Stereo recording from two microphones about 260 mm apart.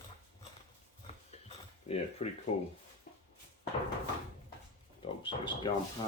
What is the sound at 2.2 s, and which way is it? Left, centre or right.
Speech, left.